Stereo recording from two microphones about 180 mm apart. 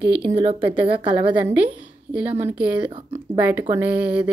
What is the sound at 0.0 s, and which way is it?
Speech, 65° right (ahead or behind).